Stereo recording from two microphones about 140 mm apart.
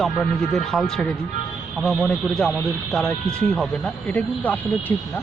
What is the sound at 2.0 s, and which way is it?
Speech, 5° left (ahead or behind).